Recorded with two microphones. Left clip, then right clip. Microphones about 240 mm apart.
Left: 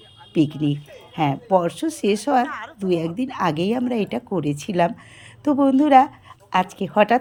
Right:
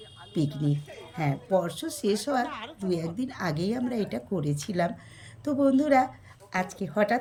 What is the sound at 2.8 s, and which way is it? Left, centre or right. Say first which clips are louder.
A woman's voice: left 8 dB; centre.